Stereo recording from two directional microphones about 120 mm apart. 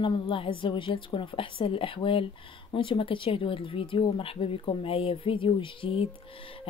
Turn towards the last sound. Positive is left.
turn(degrees=50)  # may be behind; listen again after turning